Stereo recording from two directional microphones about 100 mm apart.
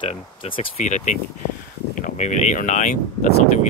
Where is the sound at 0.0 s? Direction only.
65° left (ahead or behind).